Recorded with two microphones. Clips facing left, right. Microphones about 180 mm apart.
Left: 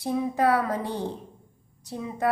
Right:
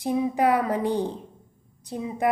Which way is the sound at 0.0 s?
15° right (ahead or behind).